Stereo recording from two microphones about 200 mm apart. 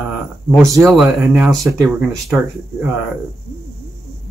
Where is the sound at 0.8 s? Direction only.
Centre (ahead or behind).